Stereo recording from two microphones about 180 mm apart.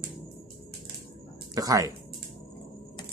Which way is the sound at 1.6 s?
20° right (ahead or behind).